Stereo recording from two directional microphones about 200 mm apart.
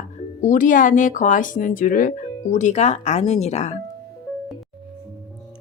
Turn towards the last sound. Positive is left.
turn(degrees=35)  # may be behind; listen again after turning